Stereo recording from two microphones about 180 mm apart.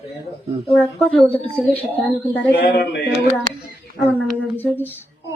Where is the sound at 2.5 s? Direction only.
65° left (ahead or behind).